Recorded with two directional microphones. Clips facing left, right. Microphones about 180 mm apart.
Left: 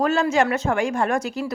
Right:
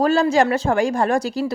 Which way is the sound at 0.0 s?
35° right (ahead or behind).